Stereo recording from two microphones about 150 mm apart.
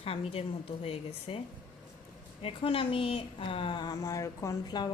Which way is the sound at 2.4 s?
35° left (ahead or behind).